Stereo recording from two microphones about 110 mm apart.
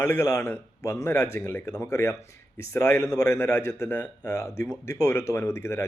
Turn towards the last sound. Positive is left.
turn(degrees=25)  # may be behind; listen again after turning